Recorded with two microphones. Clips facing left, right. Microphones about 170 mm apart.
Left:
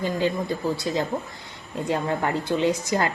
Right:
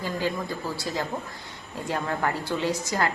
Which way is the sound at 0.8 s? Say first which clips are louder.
Left 4 dB; 20° left (ahead or behind).